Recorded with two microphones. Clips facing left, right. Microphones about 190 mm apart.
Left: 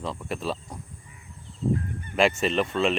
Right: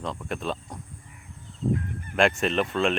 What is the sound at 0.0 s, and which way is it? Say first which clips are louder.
Speech: even; centre (ahead or behind).